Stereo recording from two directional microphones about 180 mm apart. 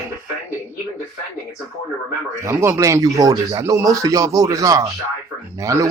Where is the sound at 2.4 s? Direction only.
15° right (ahead or behind).